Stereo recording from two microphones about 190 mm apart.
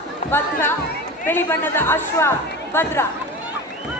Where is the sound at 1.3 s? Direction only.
10° left (ahead or behind).